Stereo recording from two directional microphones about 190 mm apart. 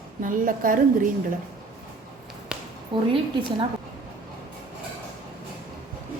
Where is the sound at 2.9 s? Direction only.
25° right (ahead or behind).